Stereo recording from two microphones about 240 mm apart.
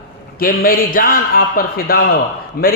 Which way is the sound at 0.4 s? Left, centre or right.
Left.